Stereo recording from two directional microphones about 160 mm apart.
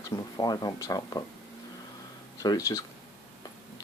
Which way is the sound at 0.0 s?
25° left (ahead or behind).